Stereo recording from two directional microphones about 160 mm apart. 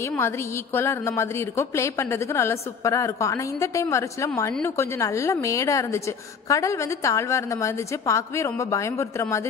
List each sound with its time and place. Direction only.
0.7 s a woman's voice: 15° left (ahead or behind)